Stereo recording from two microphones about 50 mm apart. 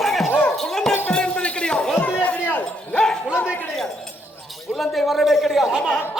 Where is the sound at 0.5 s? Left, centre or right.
Centre.